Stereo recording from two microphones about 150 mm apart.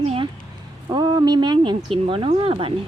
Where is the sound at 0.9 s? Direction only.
30° right (ahead or behind).